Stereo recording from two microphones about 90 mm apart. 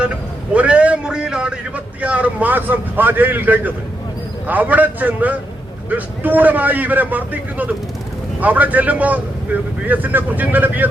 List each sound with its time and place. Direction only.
0.0 s a man's voice: 15° right (ahead or behind)